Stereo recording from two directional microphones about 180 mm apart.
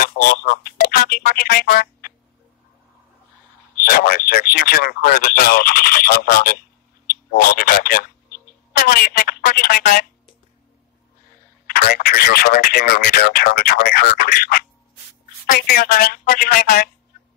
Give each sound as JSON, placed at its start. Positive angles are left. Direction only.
{"t": 0.0, "sound": "speech", "side_deg": 55}
{"t": 1.8, "sound": "quack", "side_deg": 55}
{"t": 3.9, "sound": "speech", "side_deg": 55}
{"t": 11.6, "sound": "speech", "side_deg": 55}
{"t": 15.7, "sound": "speech", "side_deg": 50}